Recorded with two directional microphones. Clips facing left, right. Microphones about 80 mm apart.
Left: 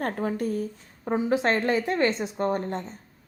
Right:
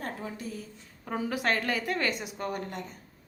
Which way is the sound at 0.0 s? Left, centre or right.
Left.